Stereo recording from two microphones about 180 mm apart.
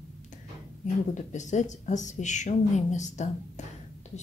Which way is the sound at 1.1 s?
40° left (ahead or behind).